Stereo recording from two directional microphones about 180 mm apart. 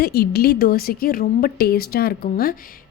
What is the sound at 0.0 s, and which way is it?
A woman's voice, 60° left (ahead or behind).